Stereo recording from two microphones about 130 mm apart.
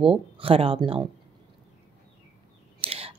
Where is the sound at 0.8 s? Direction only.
35° right (ahead or behind).